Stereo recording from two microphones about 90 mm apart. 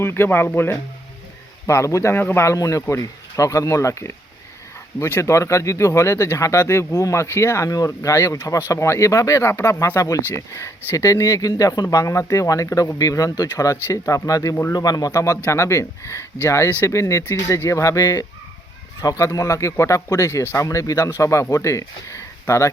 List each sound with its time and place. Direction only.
0.0 s speech: 25° left (ahead or behind)
1.6 s speech: 35° left (ahead or behind)